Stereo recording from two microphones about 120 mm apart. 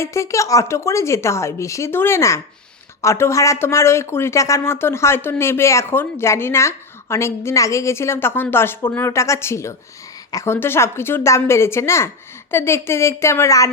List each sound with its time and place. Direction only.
0.0 s speech: 25° left (ahead or behind)